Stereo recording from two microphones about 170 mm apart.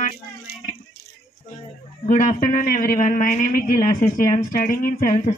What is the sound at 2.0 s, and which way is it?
Speech, 50° left (ahead or behind).